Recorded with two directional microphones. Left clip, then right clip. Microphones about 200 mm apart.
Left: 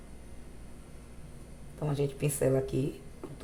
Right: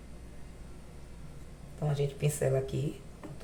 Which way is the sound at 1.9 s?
35° left (ahead or behind).